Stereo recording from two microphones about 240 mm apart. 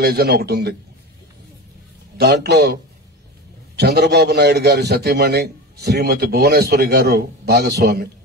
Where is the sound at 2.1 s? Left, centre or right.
Right.